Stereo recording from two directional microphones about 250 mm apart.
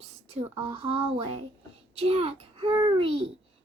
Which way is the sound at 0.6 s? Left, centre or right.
Right.